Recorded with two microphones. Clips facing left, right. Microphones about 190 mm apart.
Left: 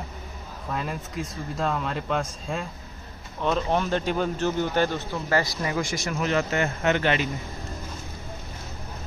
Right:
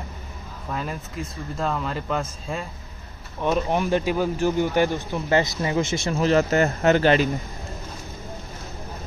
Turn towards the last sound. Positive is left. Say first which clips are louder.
# right 6 dB
turn(degrees=-35)  # may be behind; listen again after turning